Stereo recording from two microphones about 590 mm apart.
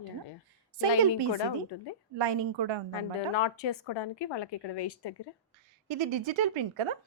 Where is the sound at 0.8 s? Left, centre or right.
Right.